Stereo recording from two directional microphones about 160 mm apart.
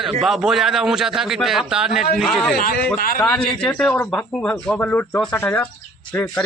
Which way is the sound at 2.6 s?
70° left (ahead or behind).